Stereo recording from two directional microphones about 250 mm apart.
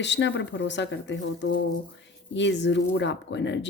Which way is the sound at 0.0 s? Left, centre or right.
Left.